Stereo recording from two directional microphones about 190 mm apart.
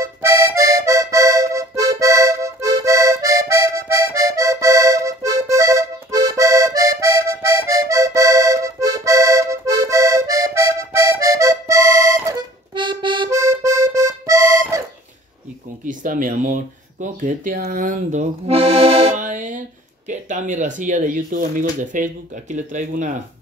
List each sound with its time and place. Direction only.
0.0 s music: 15° right (ahead or behind)
15.8 s speech: 45° right (ahead or behind)
17.6 s accordion: 45° right (ahead or behind)
20.1 s speech: 40° right (ahead or behind)